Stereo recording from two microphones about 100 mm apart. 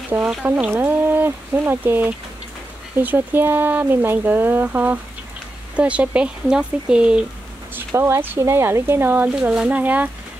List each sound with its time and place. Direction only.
0.1 s speech: 15° right (ahead or behind)
7.7 s speech: 25° right (ahead or behind)
9.3 s speech: 10° right (ahead or behind)